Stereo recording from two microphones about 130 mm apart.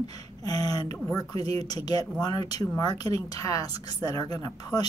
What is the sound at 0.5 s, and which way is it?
A woman's voice, 30° left (ahead or behind).